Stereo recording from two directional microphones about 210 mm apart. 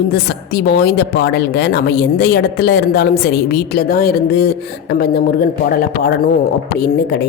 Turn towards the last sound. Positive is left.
turn(degrees=50)  # may be behind; listen again after turning